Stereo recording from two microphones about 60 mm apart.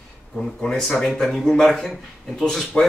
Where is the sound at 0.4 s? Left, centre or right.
Centre.